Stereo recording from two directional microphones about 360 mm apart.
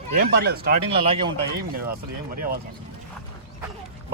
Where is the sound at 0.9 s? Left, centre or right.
Centre.